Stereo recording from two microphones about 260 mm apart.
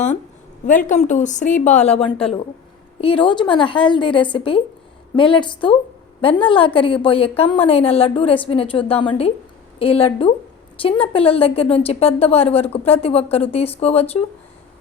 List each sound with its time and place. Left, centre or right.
0.7 s a woman's voice: left